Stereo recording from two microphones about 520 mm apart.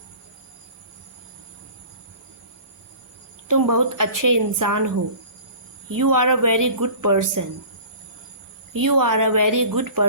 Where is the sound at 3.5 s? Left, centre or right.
Right.